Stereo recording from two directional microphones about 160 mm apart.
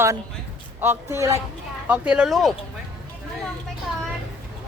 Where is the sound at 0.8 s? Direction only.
15° right (ahead or behind).